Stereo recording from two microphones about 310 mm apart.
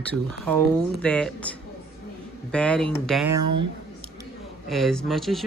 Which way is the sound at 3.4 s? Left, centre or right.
Right.